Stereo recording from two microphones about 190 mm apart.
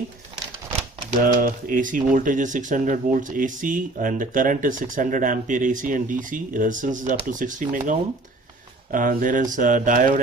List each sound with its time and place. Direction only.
1.2 s speech: 45° right (ahead or behind)